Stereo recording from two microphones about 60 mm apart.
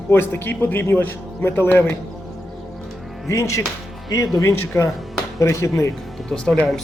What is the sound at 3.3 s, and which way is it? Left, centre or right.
Speech, left.